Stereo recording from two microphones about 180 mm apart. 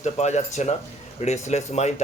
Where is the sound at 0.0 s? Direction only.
40° left (ahead or behind).